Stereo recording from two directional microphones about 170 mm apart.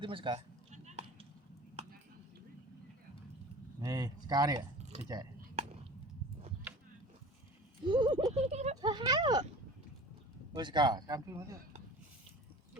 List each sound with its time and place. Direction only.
0.0 s speech: 30° right (ahead or behind)
0.7 s a sound: 40° right (ahead or behind)
3.8 s speech: 20° right (ahead or behind)
7.9 s speech: 30° right (ahead or behind)
8.4 s speech: 40° right (ahead or behind)
8.8 s speech: 25° right (ahead or behind)
10.5 s speech: 25° right (ahead or behind)